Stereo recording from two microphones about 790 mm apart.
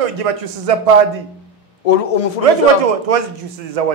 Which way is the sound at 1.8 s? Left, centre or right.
Left.